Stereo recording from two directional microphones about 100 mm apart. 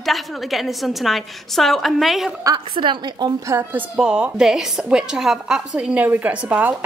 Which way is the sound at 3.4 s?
25° right (ahead or behind).